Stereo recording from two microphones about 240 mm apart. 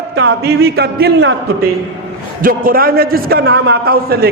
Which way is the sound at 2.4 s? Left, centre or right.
Right.